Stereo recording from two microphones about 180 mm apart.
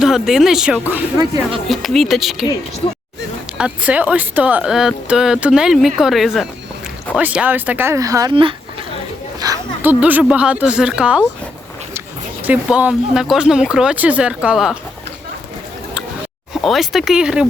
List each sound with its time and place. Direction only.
0.0 s speech: centre (ahead or behind)
3.6 s speech: 5° right (ahead or behind); by 8.5 s 30° right (ahead or behind)
9.4 s a sound: 20° right (ahead or behind)
9.9 s speech: 10° right (ahead or behind)
16.6 s speech: centre (ahead or behind)